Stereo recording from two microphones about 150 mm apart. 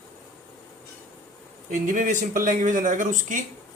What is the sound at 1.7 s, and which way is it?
Speech, 60° right (ahead or behind).